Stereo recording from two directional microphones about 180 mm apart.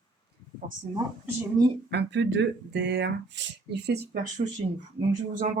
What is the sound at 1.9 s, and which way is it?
Speech, 75° right (ahead or behind).